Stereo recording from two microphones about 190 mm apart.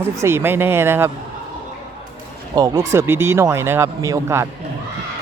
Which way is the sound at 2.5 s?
20° right (ahead or behind).